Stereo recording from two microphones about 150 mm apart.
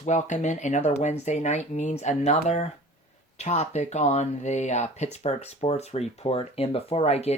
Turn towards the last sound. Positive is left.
turn(degrees=45)  # may be behind; listen again after turning